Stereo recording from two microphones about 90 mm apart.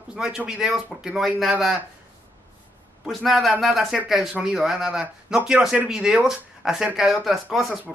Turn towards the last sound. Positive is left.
turn(degrees=0)  # may be behind; listen again after turning